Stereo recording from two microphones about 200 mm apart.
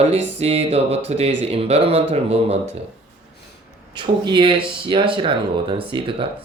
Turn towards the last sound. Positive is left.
turn(degrees=-25)  # may be behind; listen again after turning